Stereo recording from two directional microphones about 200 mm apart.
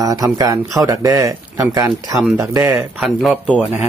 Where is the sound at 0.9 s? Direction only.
15° right (ahead or behind).